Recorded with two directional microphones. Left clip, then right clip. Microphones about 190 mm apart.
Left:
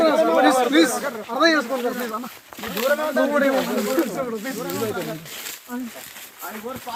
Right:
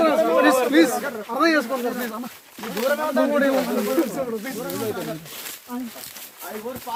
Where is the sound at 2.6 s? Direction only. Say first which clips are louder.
Left 1 dB; 25° left (ahead or behind).